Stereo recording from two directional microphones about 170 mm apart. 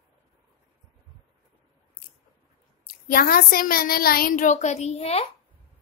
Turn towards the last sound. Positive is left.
turn(degrees=35)  # may be behind; listen again after turning